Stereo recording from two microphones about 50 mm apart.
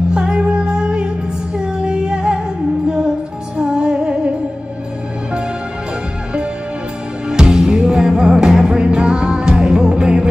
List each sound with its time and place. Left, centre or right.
0.1 s music: centre
3.5 s music: centre
7.2 s music: centre